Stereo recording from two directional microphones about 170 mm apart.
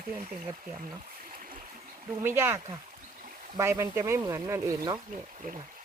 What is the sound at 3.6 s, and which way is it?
Speech, 15° right (ahead or behind).